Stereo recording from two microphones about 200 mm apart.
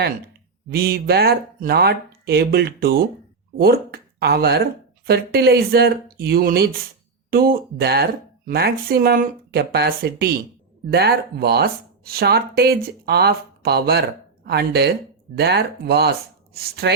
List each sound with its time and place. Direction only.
0.7 s speech: 50° right (ahead or behind)